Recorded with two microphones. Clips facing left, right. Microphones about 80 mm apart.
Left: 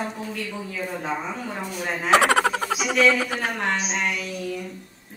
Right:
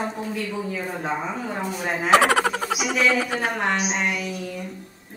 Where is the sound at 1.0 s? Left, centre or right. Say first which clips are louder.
Right 2 dB; centre.